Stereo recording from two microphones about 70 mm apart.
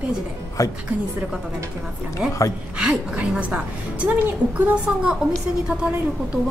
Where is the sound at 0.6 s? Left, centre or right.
Left.